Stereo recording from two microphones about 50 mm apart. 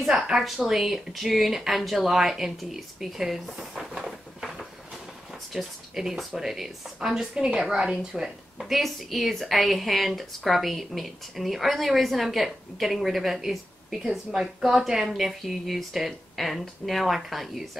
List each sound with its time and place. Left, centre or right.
0.0 s a woman's voice: centre
8.1 s a woman's voice: centre